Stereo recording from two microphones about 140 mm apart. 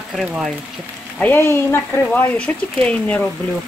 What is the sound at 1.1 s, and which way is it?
Speech, 15° left (ahead or behind).